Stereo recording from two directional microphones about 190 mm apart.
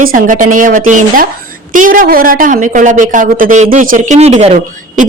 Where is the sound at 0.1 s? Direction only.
45° right (ahead or behind).